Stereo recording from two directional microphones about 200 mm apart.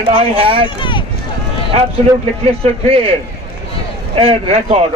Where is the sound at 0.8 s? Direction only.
25° left (ahead or behind).